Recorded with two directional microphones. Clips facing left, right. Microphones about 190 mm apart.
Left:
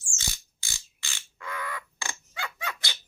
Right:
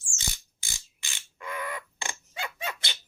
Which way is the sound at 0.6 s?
20° right (ahead or behind).